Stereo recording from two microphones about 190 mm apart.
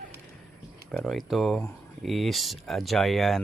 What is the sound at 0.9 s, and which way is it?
Speech, 5° left (ahead or behind).